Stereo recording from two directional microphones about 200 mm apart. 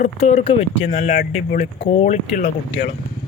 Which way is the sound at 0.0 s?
30° left (ahead or behind).